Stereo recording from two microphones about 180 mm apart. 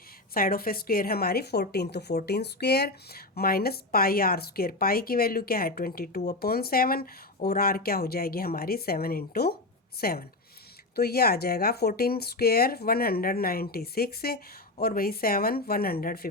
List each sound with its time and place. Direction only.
0.3 s a woman's voice: 55° left (ahead or behind)